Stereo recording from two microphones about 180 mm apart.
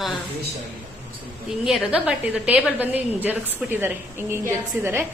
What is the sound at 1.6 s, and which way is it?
A woman's voice, 5° right (ahead or behind).